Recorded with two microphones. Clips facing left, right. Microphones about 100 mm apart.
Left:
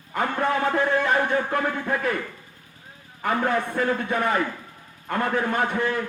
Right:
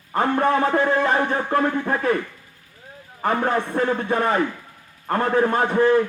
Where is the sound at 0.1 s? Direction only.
35° right (ahead or behind).